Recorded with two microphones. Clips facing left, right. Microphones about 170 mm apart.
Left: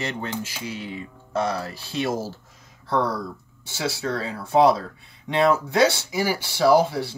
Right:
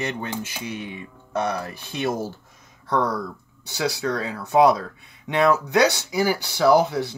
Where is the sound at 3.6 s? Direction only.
25° left (ahead or behind).